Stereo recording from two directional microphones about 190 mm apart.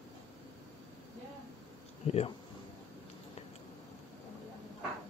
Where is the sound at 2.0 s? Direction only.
30° left (ahead or behind).